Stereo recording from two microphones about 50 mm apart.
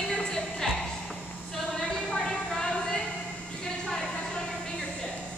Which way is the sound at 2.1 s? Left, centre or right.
Centre.